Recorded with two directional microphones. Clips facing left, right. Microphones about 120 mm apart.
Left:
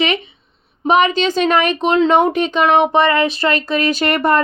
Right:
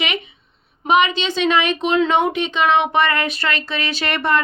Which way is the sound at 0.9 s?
40° left (ahead or behind).